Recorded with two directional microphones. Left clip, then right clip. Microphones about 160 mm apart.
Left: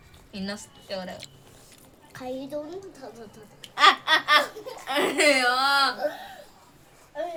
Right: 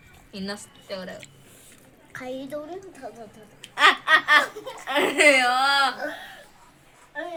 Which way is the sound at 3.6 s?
5° left (ahead or behind).